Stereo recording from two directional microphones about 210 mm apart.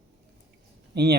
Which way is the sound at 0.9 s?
50° right (ahead or behind).